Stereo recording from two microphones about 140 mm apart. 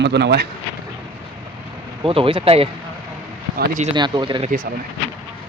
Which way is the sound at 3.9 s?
35° right (ahead or behind).